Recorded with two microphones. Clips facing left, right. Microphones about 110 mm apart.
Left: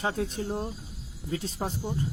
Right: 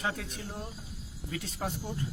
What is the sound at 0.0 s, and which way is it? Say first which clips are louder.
Speech: left 6 dB; 30° left (ahead or behind).